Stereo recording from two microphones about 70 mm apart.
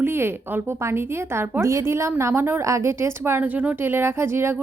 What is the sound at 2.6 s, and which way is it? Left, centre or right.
Speech, right.